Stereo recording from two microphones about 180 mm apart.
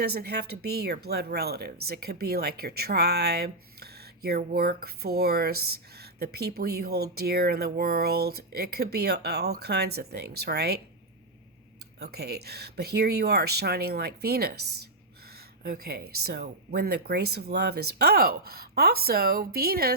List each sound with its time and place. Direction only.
0.0 s speech: 60° right (ahead or behind)
11.9 s speech: 60° right (ahead or behind)